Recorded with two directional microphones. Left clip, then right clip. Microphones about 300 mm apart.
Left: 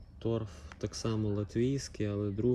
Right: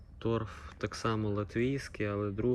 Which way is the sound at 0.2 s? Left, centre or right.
Centre.